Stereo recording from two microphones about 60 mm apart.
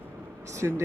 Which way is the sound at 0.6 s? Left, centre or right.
Right.